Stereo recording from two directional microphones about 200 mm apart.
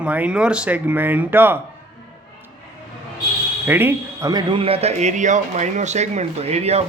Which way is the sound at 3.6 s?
10° right (ahead or behind).